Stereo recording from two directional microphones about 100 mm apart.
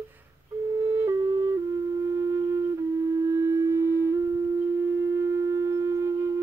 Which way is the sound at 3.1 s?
35° right (ahead or behind).